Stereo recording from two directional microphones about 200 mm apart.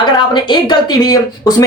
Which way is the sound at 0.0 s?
25° left (ahead or behind).